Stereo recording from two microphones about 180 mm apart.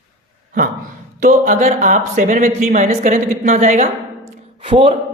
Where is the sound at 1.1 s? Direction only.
50° right (ahead or behind); by 4.9 s 35° right (ahead or behind).